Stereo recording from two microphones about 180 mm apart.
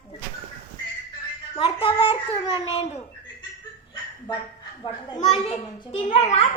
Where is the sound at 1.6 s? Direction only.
30° left (ahead or behind).